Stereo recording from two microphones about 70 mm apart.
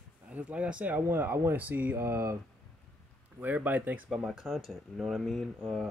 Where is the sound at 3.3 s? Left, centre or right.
Right.